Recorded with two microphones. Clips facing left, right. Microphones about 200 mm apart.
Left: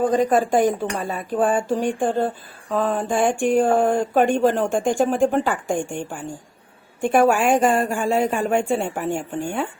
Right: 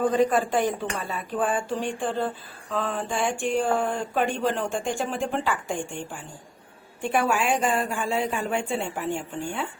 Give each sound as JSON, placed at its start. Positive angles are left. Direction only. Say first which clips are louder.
{"t": 0.1, "sound": "speech", "louder": "left 4 dB", "side_deg": 45}